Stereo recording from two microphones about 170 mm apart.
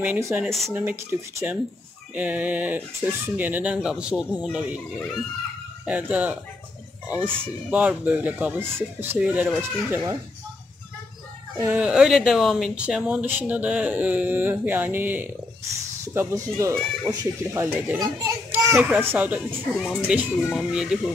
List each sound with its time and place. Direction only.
0.0 s speech: 15° right (ahead or behind)
0.5 s speech: centre (ahead or behind)
1.4 s speech: 10° right (ahead or behind)
11.6 s speech: 10° right (ahead or behind)